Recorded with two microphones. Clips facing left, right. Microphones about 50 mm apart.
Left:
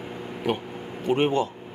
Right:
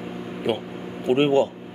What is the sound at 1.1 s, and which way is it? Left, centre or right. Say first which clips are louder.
Speech: right 4 dB; centre.